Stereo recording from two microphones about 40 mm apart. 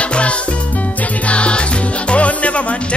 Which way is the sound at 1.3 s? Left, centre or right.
Left.